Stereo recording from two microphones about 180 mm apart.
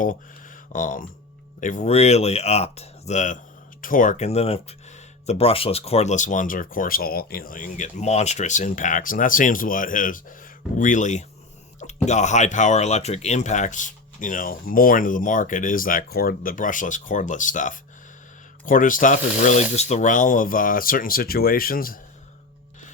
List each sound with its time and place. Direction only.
0.7 s speech: 45° left (ahead or behind)